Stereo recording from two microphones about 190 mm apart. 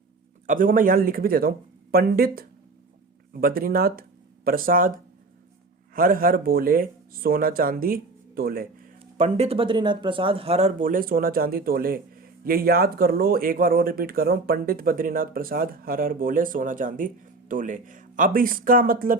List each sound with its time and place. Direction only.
0.4 s speech: 45° right (ahead or behind)
9.1 s speech: 35° right (ahead or behind)